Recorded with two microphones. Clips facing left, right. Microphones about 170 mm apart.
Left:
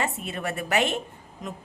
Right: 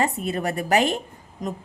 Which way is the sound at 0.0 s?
40° right (ahead or behind).